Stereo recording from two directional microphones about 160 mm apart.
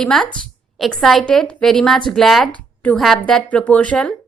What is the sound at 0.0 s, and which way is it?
A woman's voice, 5° left (ahead or behind).